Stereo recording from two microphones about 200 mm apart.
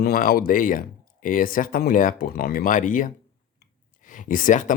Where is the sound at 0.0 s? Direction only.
45° left (ahead or behind).